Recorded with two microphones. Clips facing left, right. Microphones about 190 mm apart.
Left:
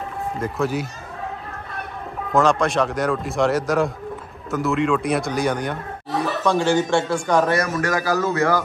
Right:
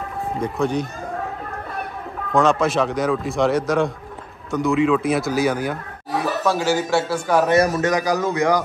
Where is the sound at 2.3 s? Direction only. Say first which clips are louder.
Right 1 dB; centre (ahead or behind).